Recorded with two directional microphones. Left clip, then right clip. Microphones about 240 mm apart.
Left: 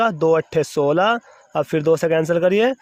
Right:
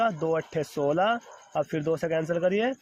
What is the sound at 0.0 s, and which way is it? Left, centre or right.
Speech, left.